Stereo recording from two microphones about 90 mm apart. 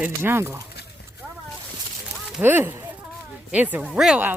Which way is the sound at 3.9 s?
5° right (ahead or behind).